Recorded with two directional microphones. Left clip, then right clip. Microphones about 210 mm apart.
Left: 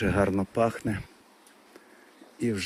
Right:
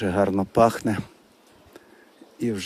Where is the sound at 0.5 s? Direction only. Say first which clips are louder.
Right 8 dB; 25° right (ahead or behind).